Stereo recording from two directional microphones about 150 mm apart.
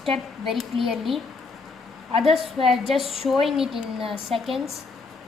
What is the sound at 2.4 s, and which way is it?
A woman's voice, centre (ahead or behind).